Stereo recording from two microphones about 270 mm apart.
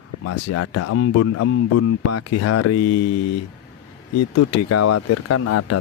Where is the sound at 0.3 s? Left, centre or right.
Left.